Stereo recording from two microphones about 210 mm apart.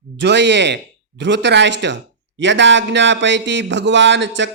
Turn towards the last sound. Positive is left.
turn(degrees=-60)  # may be behind; listen again after turning